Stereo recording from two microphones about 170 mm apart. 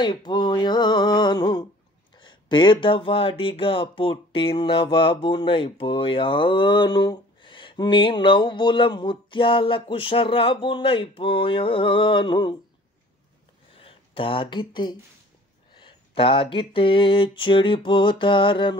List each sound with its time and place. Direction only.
0.0 s speech: 25° left (ahead or behind)
13.7 s speech: 30° left (ahead or behind)